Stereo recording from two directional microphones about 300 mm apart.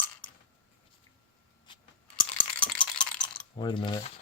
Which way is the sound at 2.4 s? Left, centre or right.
Centre.